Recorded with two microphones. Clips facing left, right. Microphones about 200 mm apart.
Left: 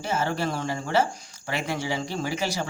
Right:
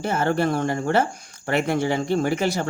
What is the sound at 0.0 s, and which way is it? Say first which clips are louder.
Speech: right 5 dB; 55° right (ahead or behind).